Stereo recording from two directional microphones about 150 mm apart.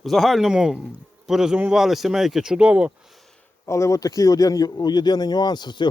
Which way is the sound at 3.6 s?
20° left (ahead or behind).